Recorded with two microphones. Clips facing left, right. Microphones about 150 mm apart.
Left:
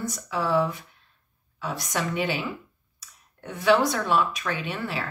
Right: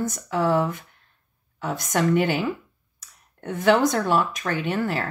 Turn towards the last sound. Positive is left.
turn(degrees=-50)  # may be behind; listen again after turning